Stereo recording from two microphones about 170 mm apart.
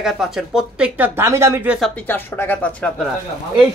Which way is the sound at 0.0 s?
Centre (ahead or behind).